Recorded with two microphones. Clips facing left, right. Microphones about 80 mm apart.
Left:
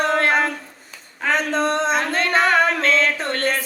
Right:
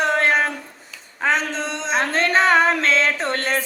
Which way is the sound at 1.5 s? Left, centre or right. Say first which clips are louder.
Left 5 dB; left.